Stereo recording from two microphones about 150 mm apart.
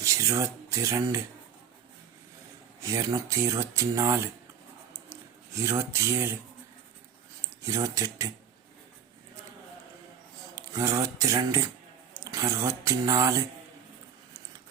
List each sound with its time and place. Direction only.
0.0 s speech: 20° right (ahead or behind)
2.8 s speech: 20° right (ahead or behind)
5.5 s speech: 20° right (ahead or behind)
7.6 s speech: 20° right (ahead or behind)
10.5 s speech: 25° right (ahead or behind)